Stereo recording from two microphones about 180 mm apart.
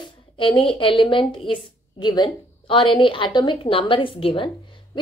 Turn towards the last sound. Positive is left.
turn(degrees=30)  # may be behind; listen again after turning